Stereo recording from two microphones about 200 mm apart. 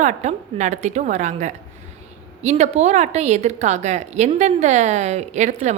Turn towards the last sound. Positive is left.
turn(degrees=-35)  # may be behind; listen again after turning